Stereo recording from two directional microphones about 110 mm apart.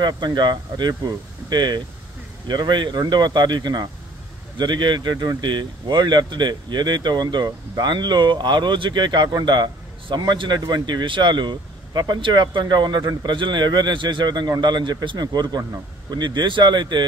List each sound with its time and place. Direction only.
0.0 s speech: 40° right (ahead or behind)